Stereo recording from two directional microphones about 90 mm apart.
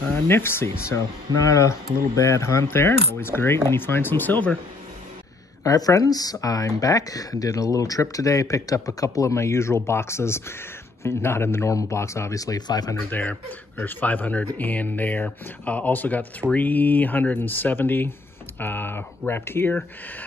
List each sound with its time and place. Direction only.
0.1 s speech: 25° left (ahead or behind)
5.6 s speech: 40° left (ahead or behind)
13.1 s speech: 20° left (ahead or behind)